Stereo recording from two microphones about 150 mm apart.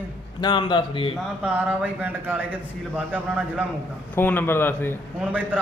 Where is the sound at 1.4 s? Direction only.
10° right (ahead or behind).